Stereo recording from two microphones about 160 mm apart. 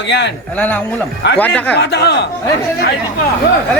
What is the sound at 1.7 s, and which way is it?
Speech, 90° left.